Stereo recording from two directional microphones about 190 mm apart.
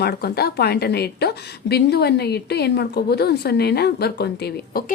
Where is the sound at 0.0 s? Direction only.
55° left (ahead or behind).